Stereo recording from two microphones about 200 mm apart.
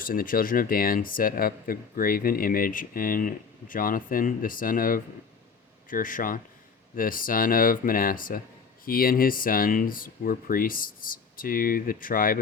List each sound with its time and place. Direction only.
0.0 s speech: 45° left (ahead or behind)